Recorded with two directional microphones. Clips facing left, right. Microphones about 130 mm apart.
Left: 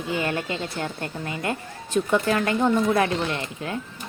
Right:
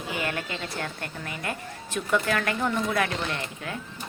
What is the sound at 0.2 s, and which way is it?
Speech, 30° left (ahead or behind).